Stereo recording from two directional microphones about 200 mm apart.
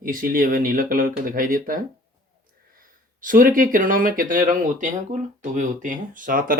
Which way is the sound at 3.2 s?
40° right (ahead or behind).